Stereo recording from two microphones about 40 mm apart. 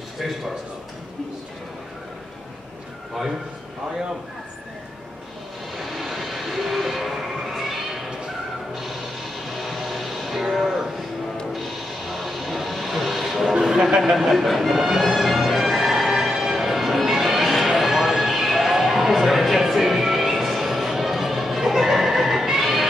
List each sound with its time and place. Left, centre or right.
5.8 s train: centre
9.5 s music: centre